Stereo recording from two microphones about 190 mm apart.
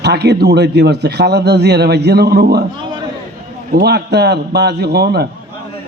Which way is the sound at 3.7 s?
60° right (ahead or behind).